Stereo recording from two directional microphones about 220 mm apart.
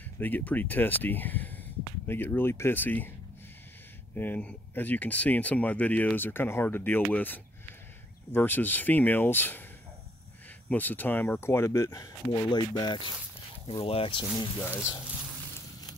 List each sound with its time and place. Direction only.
0.2 s speech: 10° left (ahead or behind)
4.1 s speech: 10° left (ahead or behind)
10.7 s speech: 10° left (ahead or behind); by 14.5 s 25° left (ahead or behind)
14.6 s speech: 10° left (ahead or behind)